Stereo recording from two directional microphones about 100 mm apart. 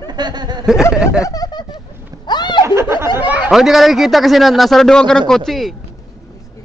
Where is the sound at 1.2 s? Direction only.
40° left (ahead or behind).